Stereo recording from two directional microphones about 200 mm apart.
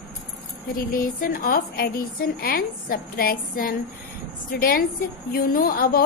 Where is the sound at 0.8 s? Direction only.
45° left (ahead or behind).